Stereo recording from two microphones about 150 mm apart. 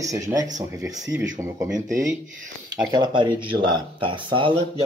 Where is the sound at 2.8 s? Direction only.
30° right (ahead or behind).